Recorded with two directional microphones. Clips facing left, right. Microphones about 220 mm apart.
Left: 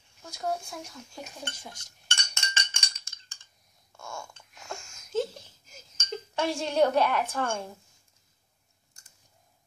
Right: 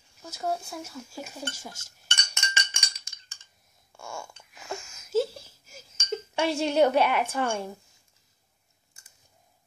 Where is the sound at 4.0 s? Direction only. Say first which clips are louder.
Right 2 dB; 10° right (ahead or behind).